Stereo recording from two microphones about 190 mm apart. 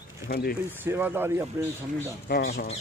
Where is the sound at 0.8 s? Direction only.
10° right (ahead or behind).